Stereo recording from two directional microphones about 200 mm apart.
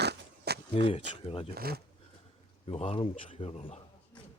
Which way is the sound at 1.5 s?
50° right (ahead or behind).